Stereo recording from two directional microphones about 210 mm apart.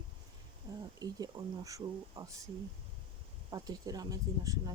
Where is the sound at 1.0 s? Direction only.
15° right (ahead or behind).